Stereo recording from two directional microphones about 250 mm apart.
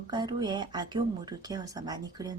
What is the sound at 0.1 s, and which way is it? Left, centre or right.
A woman's voice, centre.